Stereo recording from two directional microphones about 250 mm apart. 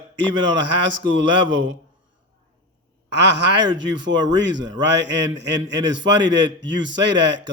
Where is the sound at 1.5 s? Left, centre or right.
Right.